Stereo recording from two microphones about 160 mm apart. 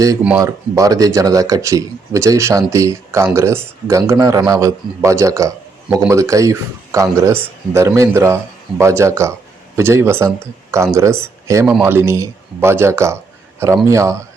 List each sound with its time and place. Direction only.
0.2 s speech: 10° right (ahead or behind)
0.4 s speech: 20° right (ahead or behind)